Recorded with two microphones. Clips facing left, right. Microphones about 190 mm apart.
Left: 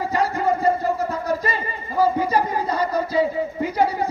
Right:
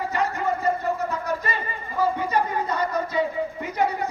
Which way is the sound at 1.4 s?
35° left (ahead or behind).